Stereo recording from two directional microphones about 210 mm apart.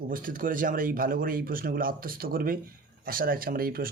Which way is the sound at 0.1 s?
40° right (ahead or behind).